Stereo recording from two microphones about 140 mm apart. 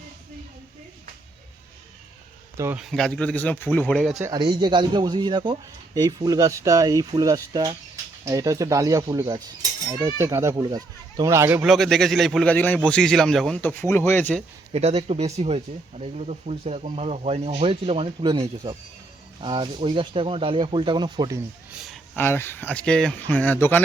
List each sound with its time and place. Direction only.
2.7 s speech: centre (ahead or behind)
4.3 s speech: 30° right (ahead or behind)
11.6 s speech: centre (ahead or behind); by 14.3 s 15° left (ahead or behind)
14.7 s speech: 45° right (ahead or behind); by 21.4 s 25° right (ahead or behind)
21.7 s speech: 5° right (ahead or behind)
22.1 s speech: 15° left (ahead or behind)